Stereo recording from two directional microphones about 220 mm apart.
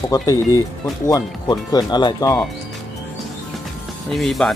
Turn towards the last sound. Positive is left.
turn(degrees=0)  # may be behind; listen again after turning